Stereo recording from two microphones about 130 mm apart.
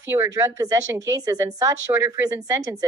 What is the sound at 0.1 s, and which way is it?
A woman's voice, 20° right (ahead or behind).